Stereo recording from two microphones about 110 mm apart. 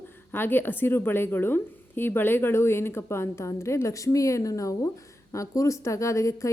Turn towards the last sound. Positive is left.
turn(degrees=30)  # may be behind; listen again after turning